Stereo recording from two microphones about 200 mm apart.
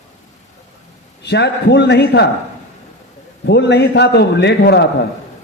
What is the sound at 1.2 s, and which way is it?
A man's voice, 60° left (ahead or behind).